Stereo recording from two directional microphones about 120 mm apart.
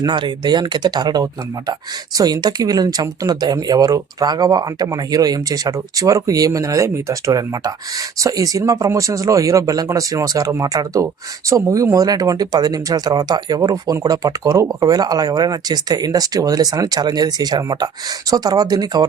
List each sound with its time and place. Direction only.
0.0 s speech: 40° right (ahead or behind)